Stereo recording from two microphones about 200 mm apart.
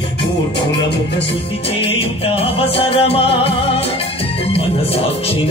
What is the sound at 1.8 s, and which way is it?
Music, 30° left (ahead or behind).